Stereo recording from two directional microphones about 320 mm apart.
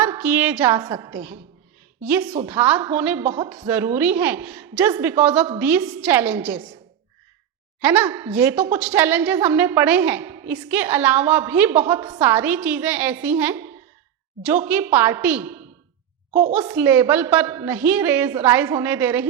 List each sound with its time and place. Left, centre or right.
0.0 s a woman's voice: centre
7.8 s a woman's voice: centre
16.3 s a woman's voice: right
16.6 s a woman's voice: centre